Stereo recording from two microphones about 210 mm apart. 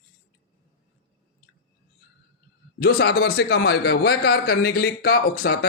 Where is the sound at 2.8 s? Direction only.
50° left (ahead or behind).